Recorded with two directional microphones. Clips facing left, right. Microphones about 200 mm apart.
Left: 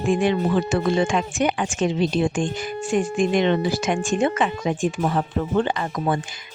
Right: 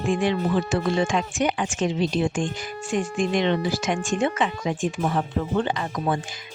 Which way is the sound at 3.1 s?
50° left (ahead or behind).